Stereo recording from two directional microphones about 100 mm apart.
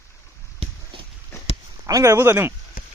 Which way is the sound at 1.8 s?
35° right (ahead or behind).